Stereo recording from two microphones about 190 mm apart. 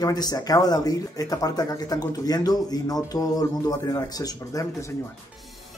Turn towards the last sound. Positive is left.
turn(degrees=20)  # may be behind; listen again after turning